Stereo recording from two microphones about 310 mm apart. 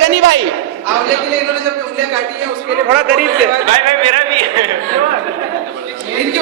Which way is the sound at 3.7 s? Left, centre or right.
Centre.